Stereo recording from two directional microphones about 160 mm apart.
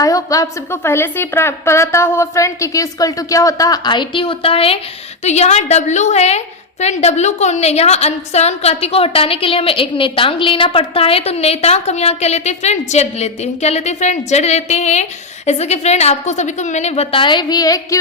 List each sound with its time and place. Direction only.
0.0 s a woman's voice: 20° left (ahead or behind)